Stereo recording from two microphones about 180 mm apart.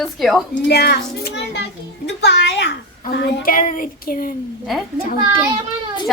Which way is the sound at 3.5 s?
45° left (ahead or behind).